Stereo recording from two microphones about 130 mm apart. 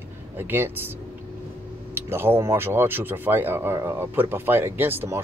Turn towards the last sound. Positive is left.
turn(degrees=-15)  # may be behind; listen again after turning